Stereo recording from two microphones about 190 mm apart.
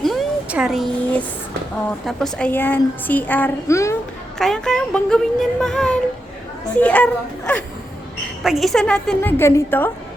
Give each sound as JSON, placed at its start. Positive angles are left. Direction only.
{"t": 0.0, "sound": "a sound", "side_deg": 0}
{"t": 2.0, "sound": "a child's voice", "side_deg": 5}
{"t": 4.4, "sound": "a child's voice", "side_deg": 5}